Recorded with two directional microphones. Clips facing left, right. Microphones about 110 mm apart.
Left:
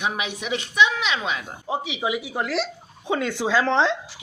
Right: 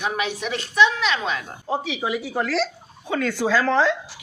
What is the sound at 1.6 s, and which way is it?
A woman's voice, 15° left (ahead or behind).